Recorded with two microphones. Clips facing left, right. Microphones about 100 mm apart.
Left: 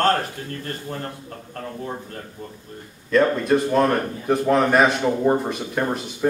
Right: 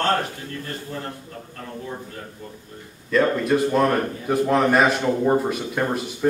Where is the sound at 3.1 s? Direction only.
Centre (ahead or behind).